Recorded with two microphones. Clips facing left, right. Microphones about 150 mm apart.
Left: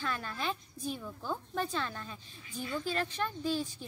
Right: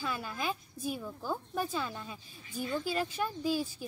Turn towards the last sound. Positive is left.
turn(degrees=-10)  # may be behind; listen again after turning